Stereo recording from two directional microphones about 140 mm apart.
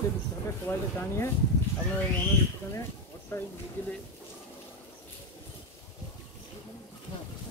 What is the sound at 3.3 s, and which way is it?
Speech, 15° left (ahead or behind).